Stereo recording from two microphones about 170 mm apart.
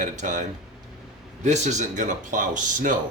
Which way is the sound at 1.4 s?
45° right (ahead or behind).